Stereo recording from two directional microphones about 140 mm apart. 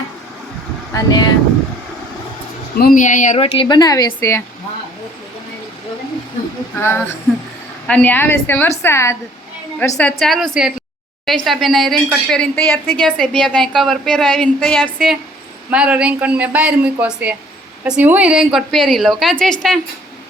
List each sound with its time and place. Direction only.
0.9 s a woman's voice: 30° left (ahead or behind)
2.7 s a woman's voice: 80° left
3.3 s a woman's voice: 40° left (ahead or behind); by 4.4 s 20° left (ahead or behind)
7.9 s a woman's voice: 10° left (ahead or behind)
10.2 s speech: centre (ahead or behind)